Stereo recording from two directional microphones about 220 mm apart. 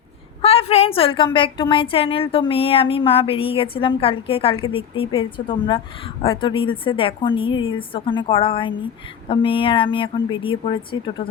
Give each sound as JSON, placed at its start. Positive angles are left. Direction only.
{"t": 0.4, "sound": "a woman's voice", "side_deg": 30}